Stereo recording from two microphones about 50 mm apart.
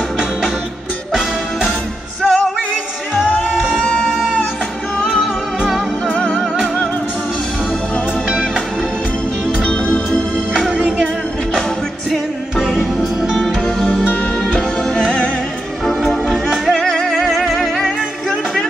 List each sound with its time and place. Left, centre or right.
2.2 s music: centre
5.6 s music: centre
9.7 s music: centre
13.3 s music: centre
14.5 s music: centre
16.7 s music: centre
17.1 s music: centre